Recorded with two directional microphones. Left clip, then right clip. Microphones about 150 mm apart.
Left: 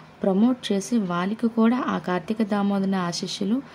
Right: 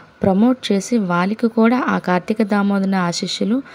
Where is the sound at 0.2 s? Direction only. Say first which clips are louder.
Right 6 dB; 25° right (ahead or behind).